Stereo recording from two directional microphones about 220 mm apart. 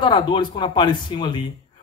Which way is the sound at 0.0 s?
20° left (ahead or behind).